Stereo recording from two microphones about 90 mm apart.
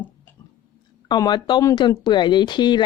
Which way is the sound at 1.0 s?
50° left (ahead or behind).